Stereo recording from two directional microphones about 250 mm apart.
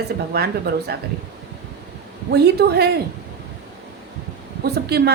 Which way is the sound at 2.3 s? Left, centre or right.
Right.